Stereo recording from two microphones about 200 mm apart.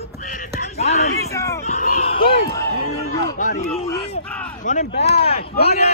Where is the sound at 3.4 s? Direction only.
45° left (ahead or behind).